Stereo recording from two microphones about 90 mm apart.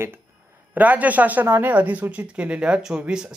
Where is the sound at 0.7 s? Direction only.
15° right (ahead or behind).